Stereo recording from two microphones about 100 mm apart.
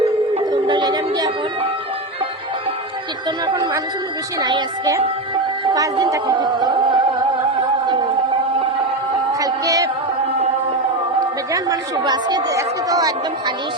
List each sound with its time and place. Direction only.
0.5 s a sound: 45° right (ahead or behind)
3.4 s speech: 50° right (ahead or behind)
5.7 s speech: 35° right (ahead or behind)
6.3 s music: 45° right (ahead or behind)
9.4 s music: 35° right (ahead or behind)
11.5 s speech: 45° right (ahead or behind)